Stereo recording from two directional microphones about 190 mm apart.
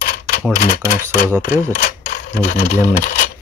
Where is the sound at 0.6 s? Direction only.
50° left (ahead or behind).